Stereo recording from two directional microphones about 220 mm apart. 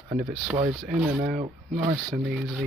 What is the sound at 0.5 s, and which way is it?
Speech, 40° right (ahead or behind).